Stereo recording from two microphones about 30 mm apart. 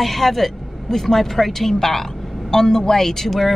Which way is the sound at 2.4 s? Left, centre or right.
Centre.